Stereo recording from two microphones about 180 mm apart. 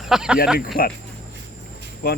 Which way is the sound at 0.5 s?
55° left (ahead or behind).